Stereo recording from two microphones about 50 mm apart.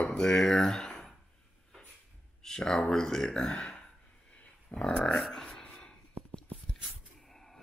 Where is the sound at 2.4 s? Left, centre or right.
Centre.